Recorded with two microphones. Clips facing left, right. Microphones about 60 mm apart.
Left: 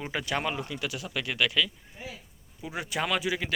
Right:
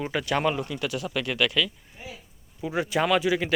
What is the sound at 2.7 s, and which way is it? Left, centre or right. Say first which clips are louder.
Speech: right 7 dB; centre.